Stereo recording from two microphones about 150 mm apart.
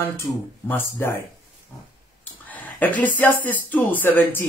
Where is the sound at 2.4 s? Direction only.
10° left (ahead or behind).